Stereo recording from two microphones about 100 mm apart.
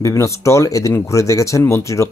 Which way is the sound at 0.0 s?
30° left (ahead or behind).